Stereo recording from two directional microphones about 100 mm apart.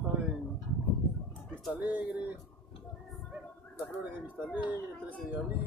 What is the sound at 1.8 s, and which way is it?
Speech, 15° right (ahead or behind).